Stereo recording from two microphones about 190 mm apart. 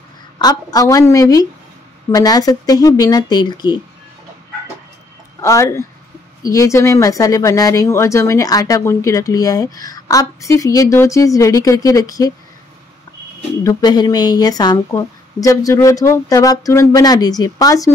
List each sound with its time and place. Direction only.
0.4 s a woman's voice: 20° left (ahead or behind)
5.4 s speech: 15° left (ahead or behind)
13.7 s a woman's voice: 20° left (ahead or behind)